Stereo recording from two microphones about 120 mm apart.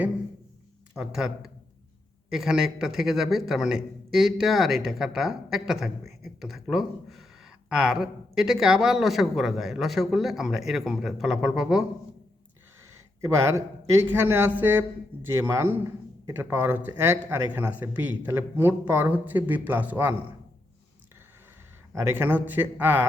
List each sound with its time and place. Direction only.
0.9 s speech: 5° right (ahead or behind)
13.2 s a man's voice: 25° right (ahead or behind)
22.0 s a man's voice: 15° right (ahead or behind)